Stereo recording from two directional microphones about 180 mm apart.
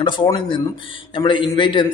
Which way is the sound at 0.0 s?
25° left (ahead or behind).